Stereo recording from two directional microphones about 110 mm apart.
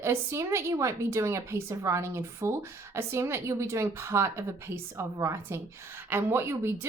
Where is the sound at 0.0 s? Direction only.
25° right (ahead or behind).